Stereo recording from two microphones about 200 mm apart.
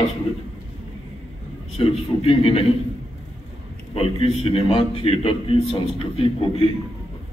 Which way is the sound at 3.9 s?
30° left (ahead or behind).